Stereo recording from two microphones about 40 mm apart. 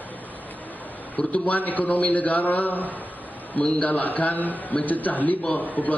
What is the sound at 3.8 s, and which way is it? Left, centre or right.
A man's voice, left.